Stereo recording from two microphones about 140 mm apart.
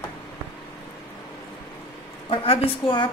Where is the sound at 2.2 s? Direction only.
40° left (ahead or behind).